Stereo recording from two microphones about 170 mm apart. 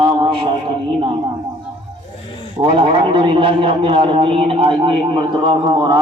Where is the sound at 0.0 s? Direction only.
35° right (ahead or behind).